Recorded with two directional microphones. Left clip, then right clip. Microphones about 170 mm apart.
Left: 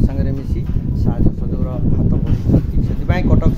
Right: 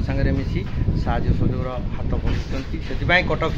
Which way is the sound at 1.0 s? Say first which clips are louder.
Left 2 dB; 5° right (ahead or behind).